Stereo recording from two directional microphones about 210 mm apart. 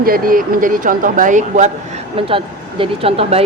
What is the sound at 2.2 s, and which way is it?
Speech, 25° right (ahead or behind).